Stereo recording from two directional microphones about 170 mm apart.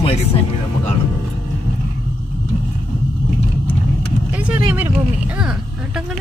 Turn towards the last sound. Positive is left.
turn(degrees=-10)  # may be behind; listen again after turning